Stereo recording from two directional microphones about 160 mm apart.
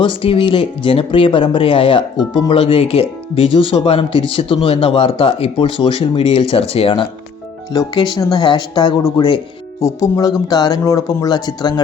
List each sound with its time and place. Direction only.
0.0 s speech: 35° left (ahead or behind)